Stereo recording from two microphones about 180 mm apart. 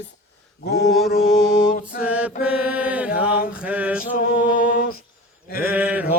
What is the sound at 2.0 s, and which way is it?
Mantra, 10° right (ahead or behind).